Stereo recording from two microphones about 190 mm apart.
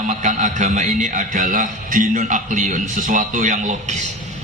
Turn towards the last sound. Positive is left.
turn(degrees=-40)  # may be behind; listen again after turning